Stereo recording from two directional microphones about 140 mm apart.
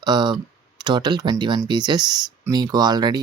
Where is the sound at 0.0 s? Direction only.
30° right (ahead or behind).